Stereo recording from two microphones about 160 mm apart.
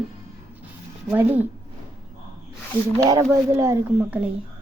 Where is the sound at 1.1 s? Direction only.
10° right (ahead or behind).